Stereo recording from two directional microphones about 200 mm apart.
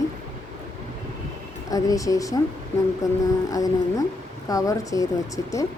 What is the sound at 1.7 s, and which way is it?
Speech, 15° left (ahead or behind).